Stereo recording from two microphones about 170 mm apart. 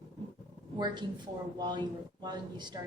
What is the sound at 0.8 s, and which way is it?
Speech, 25° right (ahead or behind).